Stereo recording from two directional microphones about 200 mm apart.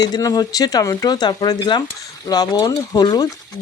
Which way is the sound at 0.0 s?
20° left (ahead or behind).